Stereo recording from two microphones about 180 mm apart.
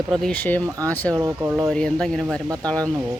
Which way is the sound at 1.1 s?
15° right (ahead or behind).